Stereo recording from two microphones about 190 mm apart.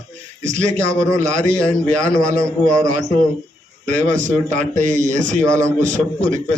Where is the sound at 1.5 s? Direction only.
5° left (ahead or behind).